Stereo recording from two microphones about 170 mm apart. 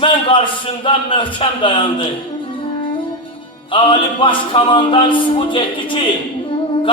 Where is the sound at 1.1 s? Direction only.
35° left (ahead or behind).